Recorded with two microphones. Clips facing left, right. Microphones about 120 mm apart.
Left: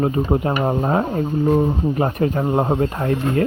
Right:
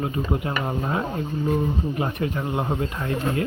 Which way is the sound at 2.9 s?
45° left (ahead or behind).